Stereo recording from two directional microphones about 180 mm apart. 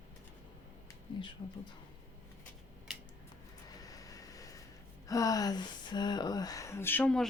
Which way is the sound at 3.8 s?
20° left (ahead or behind).